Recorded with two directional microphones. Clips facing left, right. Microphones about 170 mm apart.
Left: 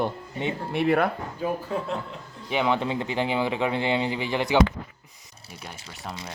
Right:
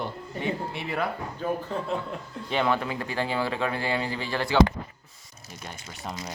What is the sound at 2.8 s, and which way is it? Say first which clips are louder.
Speech: left 3 dB; 25° left (ahead or behind).